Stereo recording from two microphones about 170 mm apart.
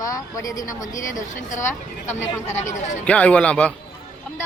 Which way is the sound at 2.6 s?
45° left (ahead or behind).